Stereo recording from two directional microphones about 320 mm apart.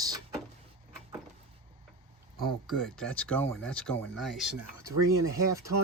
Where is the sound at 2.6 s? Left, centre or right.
Centre.